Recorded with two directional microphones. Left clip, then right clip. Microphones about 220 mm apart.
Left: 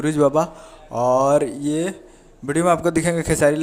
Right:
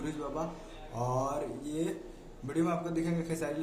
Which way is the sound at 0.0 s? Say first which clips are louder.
Left 19 dB; 40° left (ahead or behind).